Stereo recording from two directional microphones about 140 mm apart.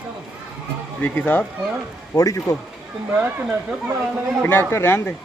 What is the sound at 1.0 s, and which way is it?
Speech, 10° left (ahead or behind).